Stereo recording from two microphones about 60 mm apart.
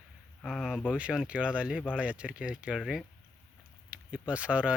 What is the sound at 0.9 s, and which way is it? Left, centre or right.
Speech, centre.